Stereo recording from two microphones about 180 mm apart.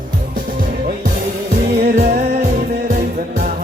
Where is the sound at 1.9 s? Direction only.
45° right (ahead or behind).